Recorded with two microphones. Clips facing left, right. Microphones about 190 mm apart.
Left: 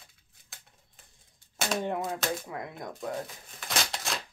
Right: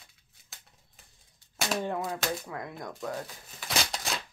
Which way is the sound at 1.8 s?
20° left (ahead or behind).